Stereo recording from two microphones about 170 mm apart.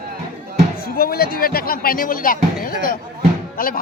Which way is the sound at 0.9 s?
60° left (ahead or behind).